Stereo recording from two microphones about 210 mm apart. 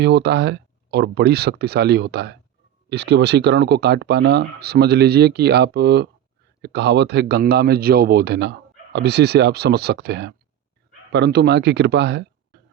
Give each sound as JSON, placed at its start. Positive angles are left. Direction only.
{"t": 0.0, "sound": "a man's voice", "side_deg": -55}